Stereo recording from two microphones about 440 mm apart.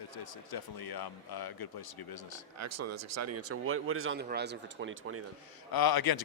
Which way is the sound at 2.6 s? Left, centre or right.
Right.